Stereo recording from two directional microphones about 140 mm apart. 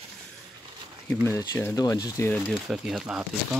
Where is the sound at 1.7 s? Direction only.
25° left (ahead or behind).